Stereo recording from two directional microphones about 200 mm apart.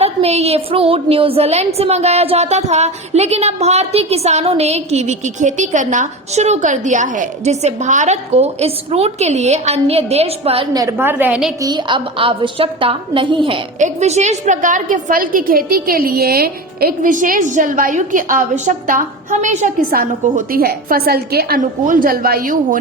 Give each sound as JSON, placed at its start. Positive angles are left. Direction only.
{"t": 0.0, "sound": "a woman's voice", "side_deg": -30}
{"t": 10.8, "sound": "a woman's voice", "side_deg": -15}
{"t": 11.6, "sound": "a woman's voice", "side_deg": -20}
{"t": 13.7, "sound": "a woman's voice", "side_deg": -35}